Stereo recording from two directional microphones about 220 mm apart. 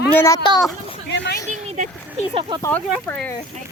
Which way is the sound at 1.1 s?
55° left (ahead or behind).